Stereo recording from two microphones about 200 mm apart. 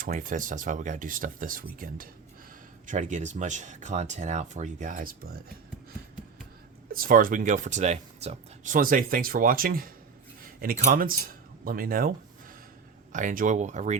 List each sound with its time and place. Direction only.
0.0 s speech: 40° right (ahead or behind)
6.9 s speech: 45° right (ahead or behind)